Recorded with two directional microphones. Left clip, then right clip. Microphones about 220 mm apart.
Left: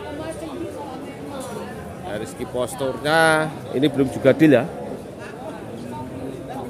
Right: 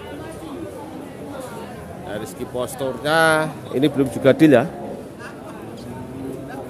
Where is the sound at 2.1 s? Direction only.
5° right (ahead or behind).